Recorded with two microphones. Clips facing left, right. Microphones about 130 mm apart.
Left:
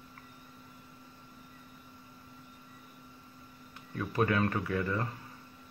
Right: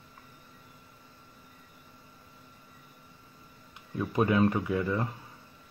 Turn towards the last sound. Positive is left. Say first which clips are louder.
# right 3 dB
turn(degrees=-15)  # may be behind; listen again after turning